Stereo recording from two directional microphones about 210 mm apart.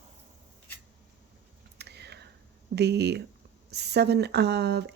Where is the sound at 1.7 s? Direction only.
50° right (ahead or behind).